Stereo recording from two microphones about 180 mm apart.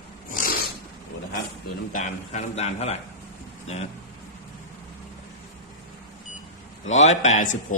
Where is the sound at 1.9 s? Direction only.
45° left (ahead or behind).